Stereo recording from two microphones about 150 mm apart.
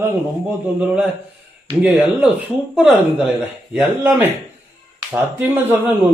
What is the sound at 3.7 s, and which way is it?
A man's voice, 10° right (ahead or behind).